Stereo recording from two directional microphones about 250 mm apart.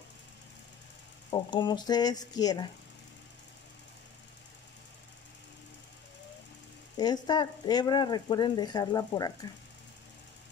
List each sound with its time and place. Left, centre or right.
1.3 s speech: centre
7.0 s speech: centre